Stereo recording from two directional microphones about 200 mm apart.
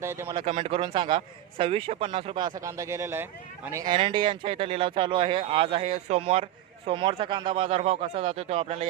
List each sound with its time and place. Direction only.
0.0 s speech: 10° right (ahead or behind)
0.3 s speech: 30° right (ahead or behind)
3.9 s speech: 25° right (ahead or behind)